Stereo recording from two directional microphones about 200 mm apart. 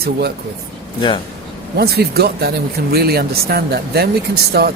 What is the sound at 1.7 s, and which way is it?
Speech, 50° right (ahead or behind).